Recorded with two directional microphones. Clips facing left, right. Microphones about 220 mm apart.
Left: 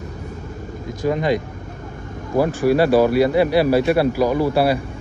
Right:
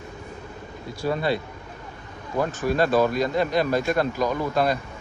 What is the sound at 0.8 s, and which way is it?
Speech, 15° left (ahead or behind).